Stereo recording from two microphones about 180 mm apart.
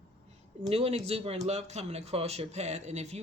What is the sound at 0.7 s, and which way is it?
Speech, 35° right (ahead or behind).